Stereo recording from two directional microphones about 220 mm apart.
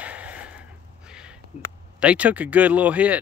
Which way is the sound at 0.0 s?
5° right (ahead or behind).